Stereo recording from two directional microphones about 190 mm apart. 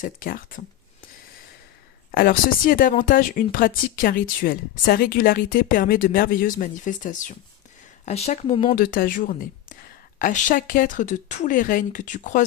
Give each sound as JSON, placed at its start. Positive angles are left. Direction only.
{"t": 0.0, "sound": "speech", "side_deg": 45}
{"t": 2.1, "sound": "speech", "side_deg": 50}
{"t": 8.6, "sound": "speech", "side_deg": 50}